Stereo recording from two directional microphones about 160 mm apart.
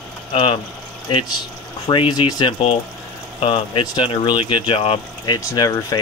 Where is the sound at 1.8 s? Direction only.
30° left (ahead or behind).